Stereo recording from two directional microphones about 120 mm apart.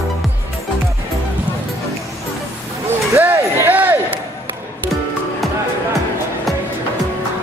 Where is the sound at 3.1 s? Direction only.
15° right (ahead or behind).